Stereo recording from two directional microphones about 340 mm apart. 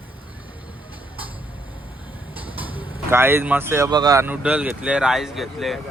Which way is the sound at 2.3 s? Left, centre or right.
Centre.